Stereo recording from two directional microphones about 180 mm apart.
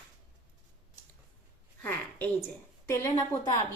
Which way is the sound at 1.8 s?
10° left (ahead or behind).